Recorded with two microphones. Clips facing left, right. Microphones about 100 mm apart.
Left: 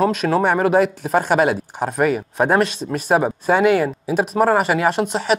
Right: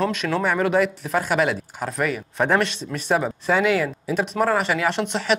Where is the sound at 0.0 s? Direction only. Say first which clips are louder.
Left 5 dB; 40° left (ahead or behind).